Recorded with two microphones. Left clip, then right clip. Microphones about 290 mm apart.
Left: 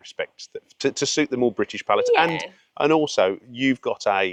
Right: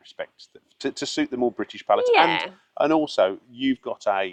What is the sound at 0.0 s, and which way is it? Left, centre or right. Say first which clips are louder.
Speech: left 5 dB; left.